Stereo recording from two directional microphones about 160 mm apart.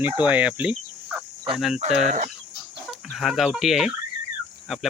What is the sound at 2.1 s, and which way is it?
Speech, 50° right (ahead or behind).